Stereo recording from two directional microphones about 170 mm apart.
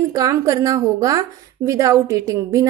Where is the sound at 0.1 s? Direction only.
20° right (ahead or behind).